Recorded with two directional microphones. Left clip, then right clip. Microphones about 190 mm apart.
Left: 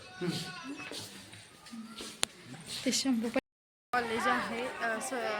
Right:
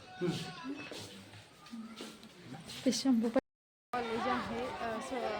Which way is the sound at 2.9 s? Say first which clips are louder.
Even; 20° right (ahead or behind).